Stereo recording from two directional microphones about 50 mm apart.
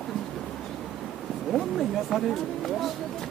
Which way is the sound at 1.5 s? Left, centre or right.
Centre.